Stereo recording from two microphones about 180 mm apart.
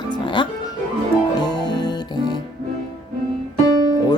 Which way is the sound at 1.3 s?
25° left (ahead or behind).